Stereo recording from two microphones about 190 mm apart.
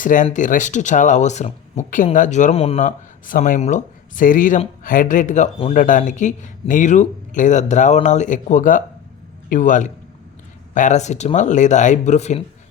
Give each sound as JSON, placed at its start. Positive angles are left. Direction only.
{"t": 0.0, "sound": "speech", "side_deg": 45}
{"t": 2.8, "sound": "speech", "side_deg": 45}